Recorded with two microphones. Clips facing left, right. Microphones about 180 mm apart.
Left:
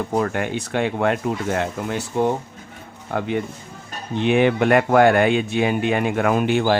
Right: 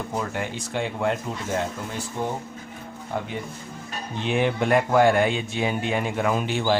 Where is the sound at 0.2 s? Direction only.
60° left (ahead or behind).